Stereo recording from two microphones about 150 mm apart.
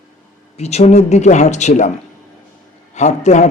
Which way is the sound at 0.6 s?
45° left (ahead or behind).